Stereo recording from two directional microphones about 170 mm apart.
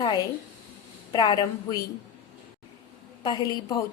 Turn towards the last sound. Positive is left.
turn(degrees=20)  # may be behind; listen again after turning